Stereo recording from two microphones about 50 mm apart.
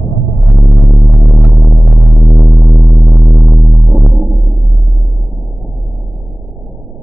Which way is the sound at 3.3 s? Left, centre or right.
Centre.